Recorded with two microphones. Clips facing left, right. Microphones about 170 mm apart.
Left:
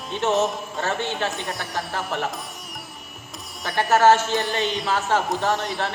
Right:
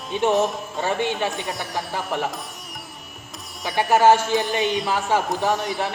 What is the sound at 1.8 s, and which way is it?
Speech, 15° right (ahead or behind).